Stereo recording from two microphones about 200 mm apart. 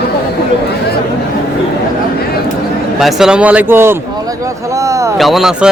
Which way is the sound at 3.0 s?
Centre (ahead or behind).